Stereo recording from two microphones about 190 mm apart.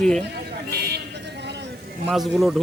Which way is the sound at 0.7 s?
55° right (ahead or behind).